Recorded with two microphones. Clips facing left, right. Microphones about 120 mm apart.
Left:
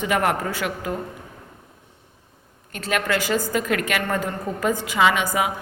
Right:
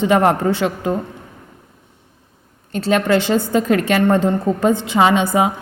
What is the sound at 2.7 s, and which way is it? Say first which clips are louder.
A woman's voice: right 8 dB; 30° right (ahead or behind).